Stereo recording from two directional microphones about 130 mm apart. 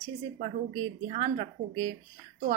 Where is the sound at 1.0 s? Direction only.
45° right (ahead or behind).